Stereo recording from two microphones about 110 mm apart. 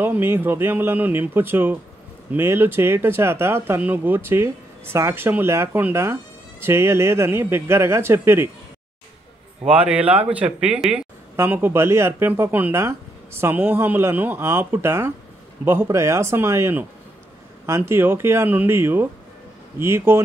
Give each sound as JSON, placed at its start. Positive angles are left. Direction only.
{"t": 0.0, "sound": "speech", "side_deg": -20}
{"t": 9.7, "sound": "speech", "side_deg": -10}